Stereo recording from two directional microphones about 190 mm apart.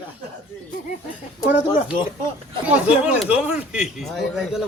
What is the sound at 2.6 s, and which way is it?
Speech, 5° right (ahead or behind).